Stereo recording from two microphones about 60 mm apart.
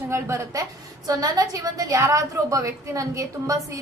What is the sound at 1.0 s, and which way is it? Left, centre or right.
A woman's voice, right.